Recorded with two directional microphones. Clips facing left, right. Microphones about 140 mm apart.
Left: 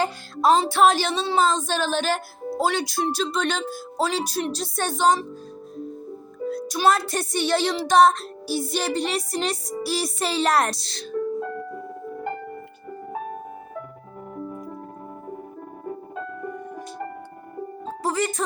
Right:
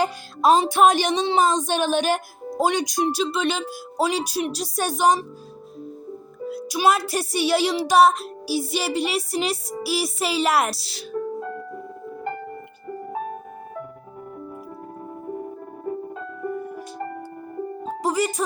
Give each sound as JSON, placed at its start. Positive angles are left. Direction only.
{"t": 0.0, "sound": "music", "side_deg": -15}
{"t": 6.4, "sound": "music", "side_deg": -5}
{"t": 17.8, "sound": "music", "side_deg": -15}